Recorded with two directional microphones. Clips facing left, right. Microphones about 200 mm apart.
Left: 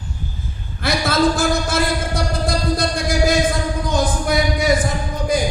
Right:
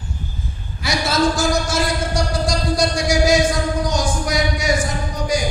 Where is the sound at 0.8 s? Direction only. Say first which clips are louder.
Left 2 dB; 55° left (ahead or behind).